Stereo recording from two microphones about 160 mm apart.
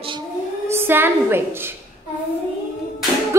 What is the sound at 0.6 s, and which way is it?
A woman's voice, 15° right (ahead or behind).